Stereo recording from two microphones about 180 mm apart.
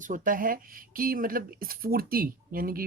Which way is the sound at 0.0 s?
50° right (ahead or behind).